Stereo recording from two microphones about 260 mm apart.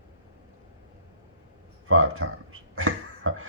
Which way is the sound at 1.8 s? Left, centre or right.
Right.